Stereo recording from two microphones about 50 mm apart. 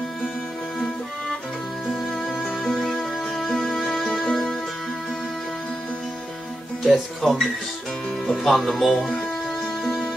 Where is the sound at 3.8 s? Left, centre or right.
Centre.